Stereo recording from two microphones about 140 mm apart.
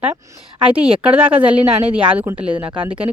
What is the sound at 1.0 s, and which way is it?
Speech, 10° right (ahead or behind).